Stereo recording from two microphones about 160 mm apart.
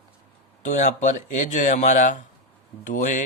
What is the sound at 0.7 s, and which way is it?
Speech, 50° left (ahead or behind).